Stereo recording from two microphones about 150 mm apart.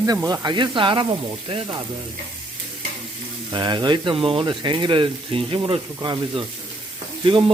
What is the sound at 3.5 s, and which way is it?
Speech, 30° right (ahead or behind).